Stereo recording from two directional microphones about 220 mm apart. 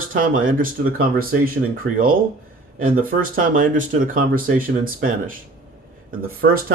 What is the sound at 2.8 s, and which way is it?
Speech, 40° right (ahead or behind).